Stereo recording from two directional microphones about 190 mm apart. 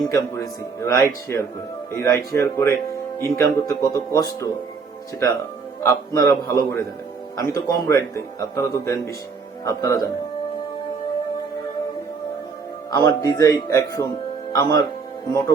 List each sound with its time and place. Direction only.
0.1 s speech: 15° left (ahead or behind)
5.8 s speech: 15° left (ahead or behind)
12.9 s speech: 20° left (ahead or behind)